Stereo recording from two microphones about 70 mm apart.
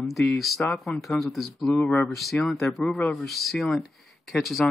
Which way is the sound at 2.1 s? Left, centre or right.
Centre.